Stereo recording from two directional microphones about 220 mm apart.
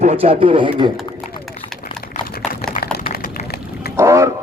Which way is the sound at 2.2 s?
45° left (ahead or behind).